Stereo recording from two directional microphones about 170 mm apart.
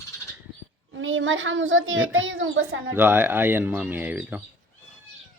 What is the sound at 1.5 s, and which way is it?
Speech, 90° right.